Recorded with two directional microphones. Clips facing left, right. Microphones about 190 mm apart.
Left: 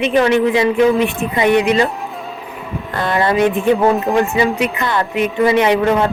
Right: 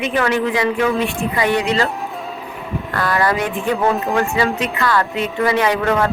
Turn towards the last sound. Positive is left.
turn(degrees=20)  # may be behind; listen again after turning